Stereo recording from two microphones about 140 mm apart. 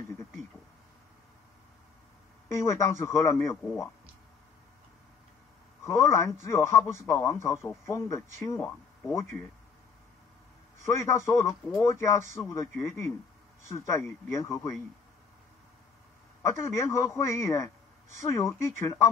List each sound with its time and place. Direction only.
2.5 s speech: 20° left (ahead or behind)
5.9 s speech: 20° left (ahead or behind)
10.9 s speech: 20° left (ahead or behind)
16.4 s speech: 20° left (ahead or behind)